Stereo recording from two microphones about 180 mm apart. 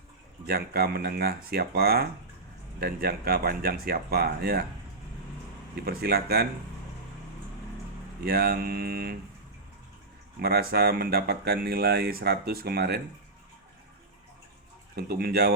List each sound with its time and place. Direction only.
0.4 s speech: 60° right (ahead or behind)
5.8 s speech: 60° right (ahead or behind)
8.2 s speech: 60° right (ahead or behind)
10.4 s speech: 60° right (ahead or behind)
14.9 s speech: 60° right (ahead or behind)